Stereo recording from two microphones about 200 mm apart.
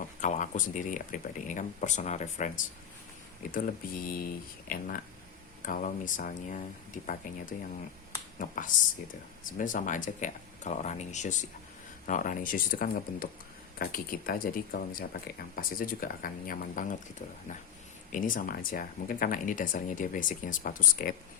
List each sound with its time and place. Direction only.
0.2 s speech: 40° left (ahead or behind)
8.4 s speech: 40° left (ahead or behind)